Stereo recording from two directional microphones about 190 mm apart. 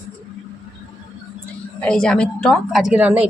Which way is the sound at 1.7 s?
5° left (ahead or behind).